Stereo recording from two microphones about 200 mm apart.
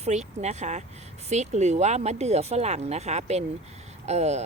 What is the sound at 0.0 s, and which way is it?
Speech, 35° right (ahead or behind).